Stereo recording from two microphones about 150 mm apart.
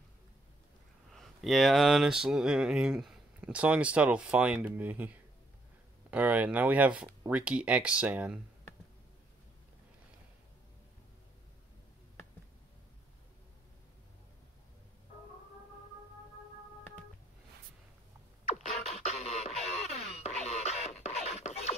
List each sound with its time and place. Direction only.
1.1 s speech: centre (ahead or behind)
18.5 s music: 45° left (ahead or behind)
20.2 s beatboxing: 45° left (ahead or behind)